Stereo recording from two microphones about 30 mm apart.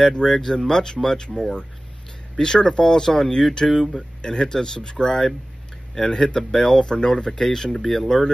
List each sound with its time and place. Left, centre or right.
0.0 s speech: left; by 8.3 s centre